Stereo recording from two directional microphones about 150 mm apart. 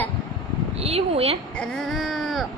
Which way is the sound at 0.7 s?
40° right (ahead or behind).